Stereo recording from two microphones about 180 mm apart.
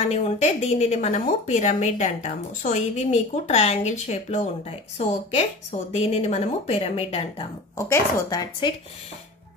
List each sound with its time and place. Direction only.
0.1 s a woman's voice: 35° left (ahead or behind)
7.7 s speech: 20° left (ahead or behind)